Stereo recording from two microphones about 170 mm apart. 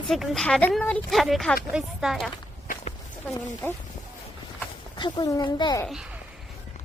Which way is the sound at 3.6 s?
10° left (ahead or behind).